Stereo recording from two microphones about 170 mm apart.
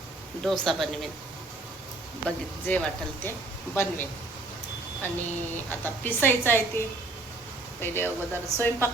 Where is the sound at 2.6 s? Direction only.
10° left (ahead or behind).